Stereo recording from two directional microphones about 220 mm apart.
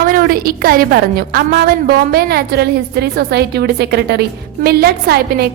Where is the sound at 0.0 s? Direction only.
40° right (ahead or behind).